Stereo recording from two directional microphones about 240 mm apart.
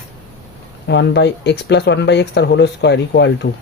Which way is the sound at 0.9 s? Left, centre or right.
Left.